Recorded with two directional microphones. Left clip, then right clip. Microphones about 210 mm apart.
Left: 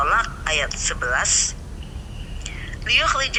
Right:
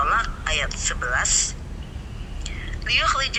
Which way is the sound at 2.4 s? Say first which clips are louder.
Left 3 dB; 25° left (ahead or behind).